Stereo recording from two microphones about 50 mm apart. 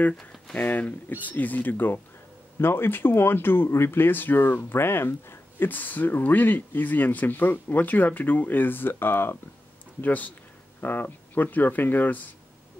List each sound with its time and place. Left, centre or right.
0.6 s speech: left
5.7 s speech: left
10.0 s speech: left